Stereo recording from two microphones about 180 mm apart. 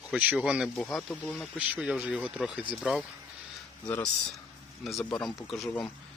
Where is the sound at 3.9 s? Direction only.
10° left (ahead or behind).